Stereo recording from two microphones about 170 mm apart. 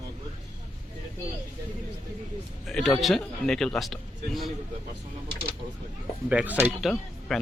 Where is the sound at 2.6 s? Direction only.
Centre (ahead or behind).